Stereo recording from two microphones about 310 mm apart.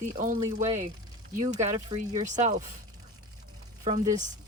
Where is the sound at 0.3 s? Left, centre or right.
Centre.